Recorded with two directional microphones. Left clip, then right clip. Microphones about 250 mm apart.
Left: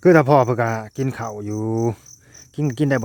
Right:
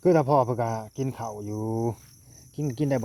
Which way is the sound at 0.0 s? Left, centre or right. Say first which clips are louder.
Left 7 dB; left.